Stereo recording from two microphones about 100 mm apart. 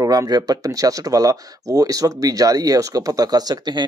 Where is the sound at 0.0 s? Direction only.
35° right (ahead or behind).